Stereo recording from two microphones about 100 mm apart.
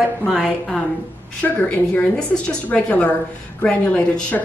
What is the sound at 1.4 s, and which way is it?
A woman's voice, 20° left (ahead or behind).